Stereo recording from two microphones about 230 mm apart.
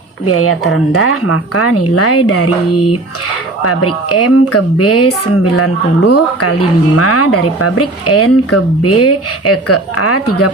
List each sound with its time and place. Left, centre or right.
0.3 s speech: left
3.6 s speech: left
6.9 s speech: left